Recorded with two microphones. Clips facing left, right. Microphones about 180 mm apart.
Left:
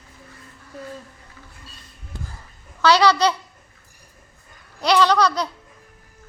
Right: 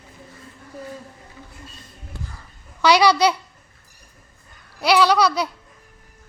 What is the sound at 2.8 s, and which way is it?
Speech, 15° right (ahead or behind).